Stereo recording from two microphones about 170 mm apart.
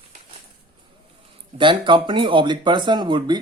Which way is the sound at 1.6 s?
30° right (ahead or behind).